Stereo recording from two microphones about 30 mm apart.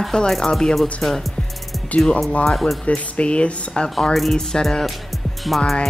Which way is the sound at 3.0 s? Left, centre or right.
Left.